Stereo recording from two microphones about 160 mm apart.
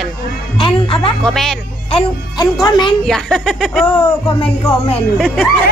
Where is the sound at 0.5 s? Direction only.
35° left (ahead or behind).